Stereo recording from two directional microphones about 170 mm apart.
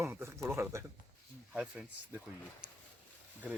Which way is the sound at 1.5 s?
5° right (ahead or behind).